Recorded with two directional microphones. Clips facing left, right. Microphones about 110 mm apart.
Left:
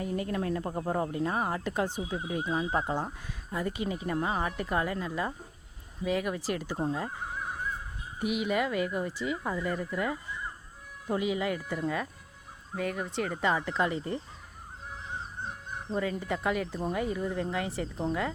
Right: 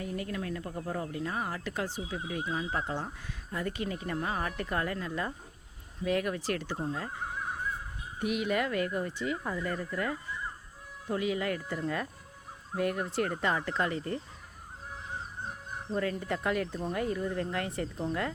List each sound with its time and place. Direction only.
0.0 s speech: 30° left (ahead or behind)
2.9 s speech: 15° left (ahead or behind)
8.2 s speech: 5° left (ahead or behind)
13.7 s speech: 15° left (ahead or behind)
16.0 s speech: 5° left (ahead or behind)